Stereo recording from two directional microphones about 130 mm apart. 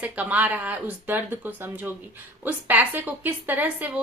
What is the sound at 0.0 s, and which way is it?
A woman's voice, 10° right (ahead or behind).